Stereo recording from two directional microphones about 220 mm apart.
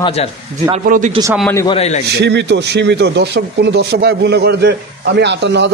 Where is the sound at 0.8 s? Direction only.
40° right (ahead or behind).